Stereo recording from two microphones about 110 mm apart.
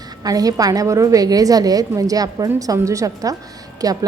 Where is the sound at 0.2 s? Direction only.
35° right (ahead or behind).